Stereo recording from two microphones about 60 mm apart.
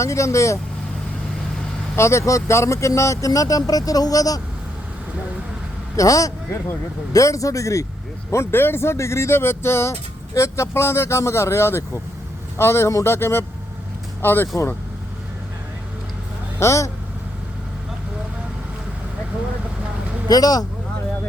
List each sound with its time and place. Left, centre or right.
0.0 s speech: left
2.0 s speech: left
6.0 s speech: left
8.3 s speech: left
13.1 s speech: left
14.4 s speech: left
16.6 s speech: left
20.2 s speech: left